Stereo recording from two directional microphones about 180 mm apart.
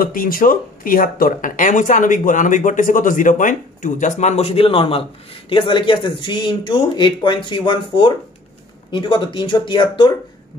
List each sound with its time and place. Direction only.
0.0 s speech: 50° left (ahead or behind); by 10.1 s 25° left (ahead or behind)